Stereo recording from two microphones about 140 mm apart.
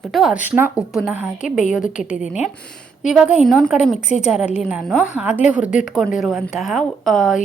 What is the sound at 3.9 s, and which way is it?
Speech, 55° left (ahead or behind).